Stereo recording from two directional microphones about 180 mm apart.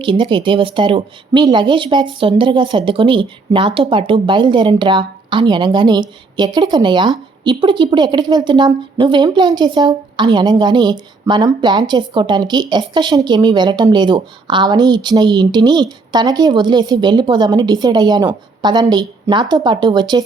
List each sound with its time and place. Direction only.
0.0 s speech: 25° right (ahead or behind)